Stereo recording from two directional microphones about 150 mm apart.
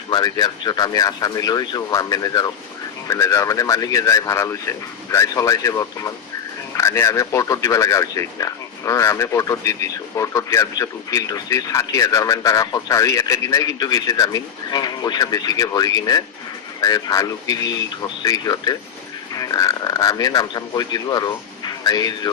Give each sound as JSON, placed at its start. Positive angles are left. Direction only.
{"t": 0.1, "sound": "speech", "side_deg": 25}